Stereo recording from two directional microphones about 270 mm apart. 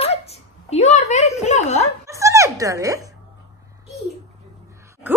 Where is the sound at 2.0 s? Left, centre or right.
Centre.